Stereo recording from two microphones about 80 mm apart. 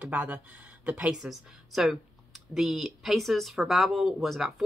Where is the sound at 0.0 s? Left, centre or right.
Centre.